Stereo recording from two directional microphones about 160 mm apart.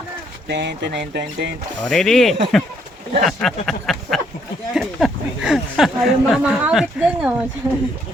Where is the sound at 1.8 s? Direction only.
5° left (ahead or behind).